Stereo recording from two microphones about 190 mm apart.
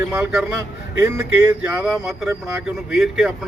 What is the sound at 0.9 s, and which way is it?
Speech, 15° right (ahead or behind).